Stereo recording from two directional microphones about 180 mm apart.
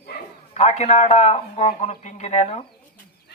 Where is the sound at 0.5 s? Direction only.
35° left (ahead or behind).